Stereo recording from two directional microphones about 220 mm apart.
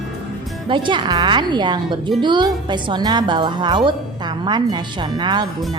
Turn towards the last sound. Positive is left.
turn(degrees=-20)  # may be behind; listen again after turning